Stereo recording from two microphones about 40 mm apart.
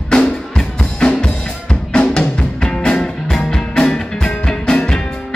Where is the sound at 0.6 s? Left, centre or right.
Centre.